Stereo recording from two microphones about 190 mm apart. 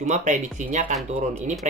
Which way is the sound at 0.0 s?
40° right (ahead or behind).